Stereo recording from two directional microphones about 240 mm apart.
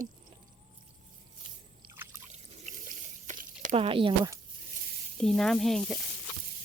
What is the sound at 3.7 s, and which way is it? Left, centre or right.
Speech, right.